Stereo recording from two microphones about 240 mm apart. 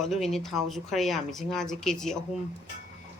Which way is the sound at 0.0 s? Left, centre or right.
Centre.